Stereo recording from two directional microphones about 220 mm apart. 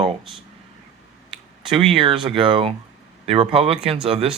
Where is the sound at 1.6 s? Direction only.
25° right (ahead or behind).